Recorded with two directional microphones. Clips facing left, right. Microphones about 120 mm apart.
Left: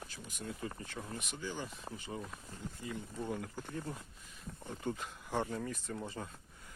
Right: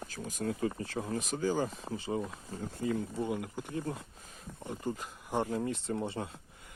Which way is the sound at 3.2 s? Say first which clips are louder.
Right 5 dB; 10° right (ahead or behind).